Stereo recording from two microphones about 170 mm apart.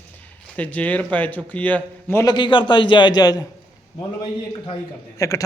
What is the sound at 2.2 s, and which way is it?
A man's voice, 25° left (ahead or behind).